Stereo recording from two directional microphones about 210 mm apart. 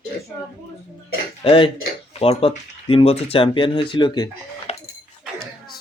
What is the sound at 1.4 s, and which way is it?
Speech, 25° left (ahead or behind).